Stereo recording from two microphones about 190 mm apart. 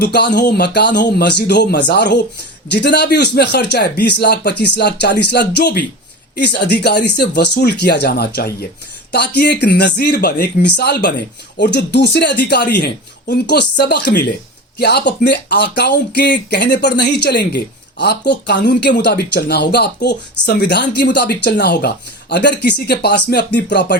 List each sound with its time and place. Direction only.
0.0 s speech: 60° left (ahead or behind)